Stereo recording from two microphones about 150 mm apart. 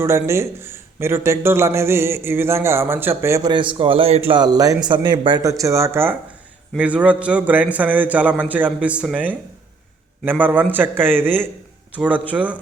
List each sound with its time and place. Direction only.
0.0 s a man's voice: 20° right (ahead or behind)
3.5 s a man's voice: 35° right (ahead or behind)
4.4 s a man's voice: 25° right (ahead or behind); by 12.5 s 10° right (ahead or behind)